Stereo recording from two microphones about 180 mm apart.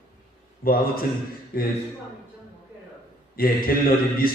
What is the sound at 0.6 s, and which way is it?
A man's voice, 55° left (ahead or behind).